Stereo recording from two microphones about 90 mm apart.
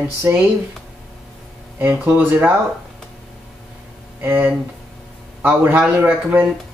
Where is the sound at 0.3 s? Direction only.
25° right (ahead or behind).